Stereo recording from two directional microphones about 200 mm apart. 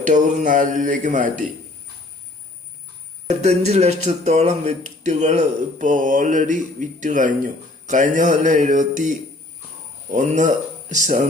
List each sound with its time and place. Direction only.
0.0 s speech: 40° right (ahead or behind)
3.2 s speech: 35° right (ahead or behind)